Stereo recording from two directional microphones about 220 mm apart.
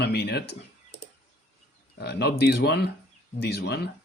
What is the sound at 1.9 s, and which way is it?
Speech, 50° left (ahead or behind).